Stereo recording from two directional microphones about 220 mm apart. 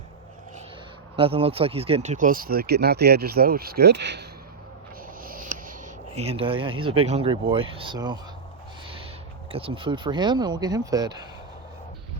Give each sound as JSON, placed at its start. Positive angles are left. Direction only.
{"t": 1.1, "sound": "speech", "side_deg": -25}
{"t": 5.2, "sound": "speech", "side_deg": -40}
{"t": 9.5, "sound": "speech", "side_deg": -25}